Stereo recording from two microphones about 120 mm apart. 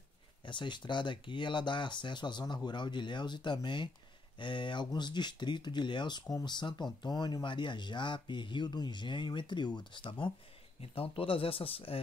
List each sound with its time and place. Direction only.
0.5 s speech: 40° left (ahead or behind)